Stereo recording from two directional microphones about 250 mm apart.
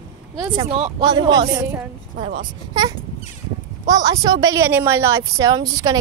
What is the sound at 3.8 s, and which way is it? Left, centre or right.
A woman's voice, centre.